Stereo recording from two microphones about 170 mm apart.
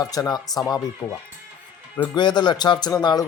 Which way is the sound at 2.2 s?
25° left (ahead or behind).